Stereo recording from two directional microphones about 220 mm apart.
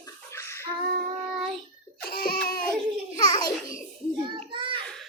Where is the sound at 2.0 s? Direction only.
40° left (ahead or behind).